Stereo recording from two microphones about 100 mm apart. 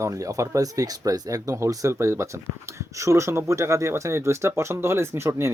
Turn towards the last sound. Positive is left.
turn(degrees=-25)  # may be behind; listen again after turning